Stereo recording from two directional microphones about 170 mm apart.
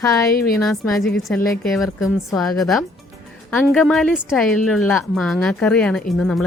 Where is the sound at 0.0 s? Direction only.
20° left (ahead or behind).